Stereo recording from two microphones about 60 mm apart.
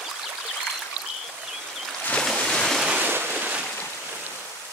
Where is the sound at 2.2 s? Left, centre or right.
Centre.